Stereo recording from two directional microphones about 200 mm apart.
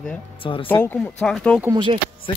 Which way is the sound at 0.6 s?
10° left (ahead or behind).